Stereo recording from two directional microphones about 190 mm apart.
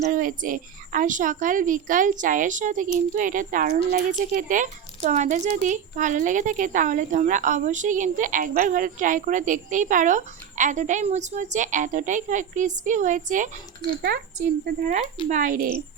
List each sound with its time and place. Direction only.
0.0 s a woman's voice: 45° right (ahead or behind)
14.6 s a woman's voice: 40° right (ahead or behind)